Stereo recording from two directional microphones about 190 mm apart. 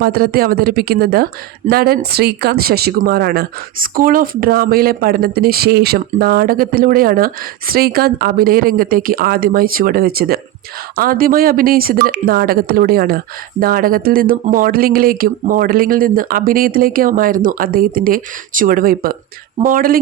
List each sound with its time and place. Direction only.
0.0 s speech: 50° right (ahead or behind)